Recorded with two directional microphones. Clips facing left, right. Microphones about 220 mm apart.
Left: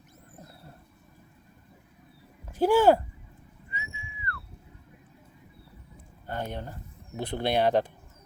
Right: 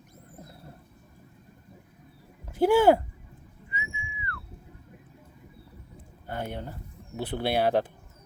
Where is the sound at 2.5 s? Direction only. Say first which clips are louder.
Right 1 dB; 10° right (ahead or behind).